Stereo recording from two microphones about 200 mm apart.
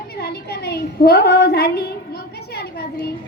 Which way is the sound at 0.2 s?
55° left (ahead or behind).